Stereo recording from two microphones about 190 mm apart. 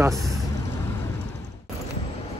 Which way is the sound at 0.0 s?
15° right (ahead or behind).